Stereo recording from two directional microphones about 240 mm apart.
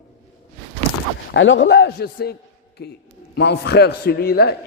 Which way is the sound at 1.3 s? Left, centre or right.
Left.